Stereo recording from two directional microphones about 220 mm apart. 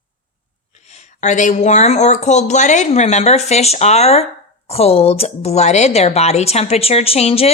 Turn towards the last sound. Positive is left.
turn(degrees=25)  # may be behind; listen again after turning